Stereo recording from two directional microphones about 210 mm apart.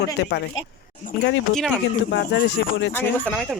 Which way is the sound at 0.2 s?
55° left (ahead or behind).